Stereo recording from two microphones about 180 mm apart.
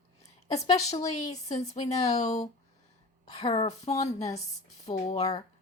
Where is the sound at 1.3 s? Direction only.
40° left (ahead or behind).